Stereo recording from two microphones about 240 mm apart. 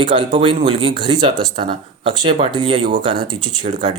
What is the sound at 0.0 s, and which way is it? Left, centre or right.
Speech, right.